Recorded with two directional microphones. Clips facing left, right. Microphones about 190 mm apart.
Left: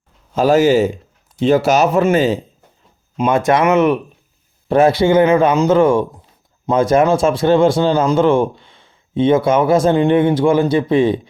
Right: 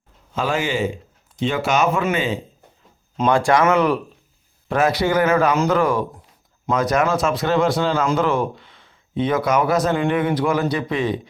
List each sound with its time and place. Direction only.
0.3 s speech: 40° left (ahead or behind)
3.2 s speech: 20° left (ahead or behind)